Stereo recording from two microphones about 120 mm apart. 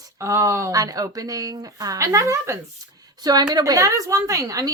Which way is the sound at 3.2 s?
35° right (ahead or behind).